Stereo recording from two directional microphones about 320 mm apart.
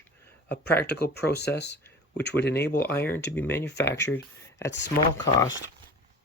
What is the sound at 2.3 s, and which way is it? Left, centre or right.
Speech, centre.